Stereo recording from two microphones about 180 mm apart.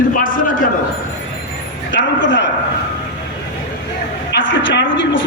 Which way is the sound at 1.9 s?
90° left.